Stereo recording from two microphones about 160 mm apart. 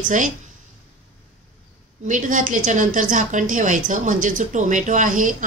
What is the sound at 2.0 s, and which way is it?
A woman's voice, 55° right (ahead or behind).